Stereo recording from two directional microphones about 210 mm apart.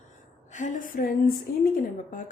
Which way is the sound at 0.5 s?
35° left (ahead or behind).